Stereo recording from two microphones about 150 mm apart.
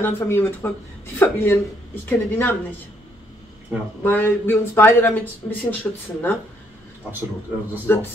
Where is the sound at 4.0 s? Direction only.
10° left (ahead or behind).